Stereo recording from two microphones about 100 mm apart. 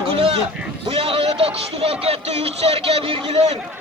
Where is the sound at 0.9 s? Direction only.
70° right (ahead or behind).